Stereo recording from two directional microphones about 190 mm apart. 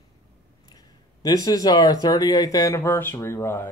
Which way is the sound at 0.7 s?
20° left (ahead or behind).